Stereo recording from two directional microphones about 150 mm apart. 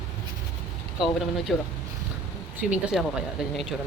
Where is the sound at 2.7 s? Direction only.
5° right (ahead or behind).